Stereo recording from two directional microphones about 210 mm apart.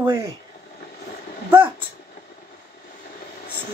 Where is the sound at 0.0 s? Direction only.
15° right (ahead or behind).